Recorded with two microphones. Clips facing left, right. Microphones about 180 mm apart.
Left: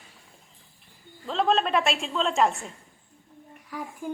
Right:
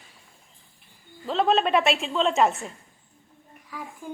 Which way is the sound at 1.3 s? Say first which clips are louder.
Right 2 dB; centre (ahead or behind).